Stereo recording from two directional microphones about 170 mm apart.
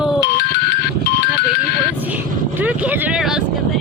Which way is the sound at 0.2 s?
70° left (ahead or behind).